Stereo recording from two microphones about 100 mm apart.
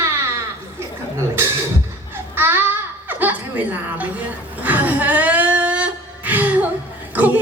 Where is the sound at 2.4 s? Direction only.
20° right (ahead or behind).